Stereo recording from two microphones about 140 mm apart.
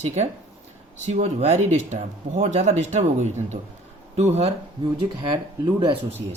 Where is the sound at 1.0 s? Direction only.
50° right (ahead or behind).